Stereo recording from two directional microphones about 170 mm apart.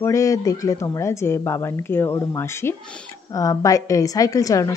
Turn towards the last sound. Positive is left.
turn(degrees=20)  # may be behind; listen again after turning